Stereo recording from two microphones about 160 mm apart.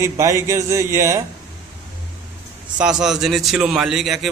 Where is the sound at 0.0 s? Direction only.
20° right (ahead or behind).